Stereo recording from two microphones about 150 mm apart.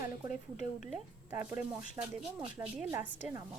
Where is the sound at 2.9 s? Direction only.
15° right (ahead or behind).